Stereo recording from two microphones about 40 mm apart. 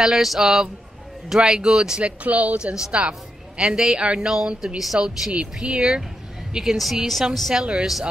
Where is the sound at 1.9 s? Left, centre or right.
Right.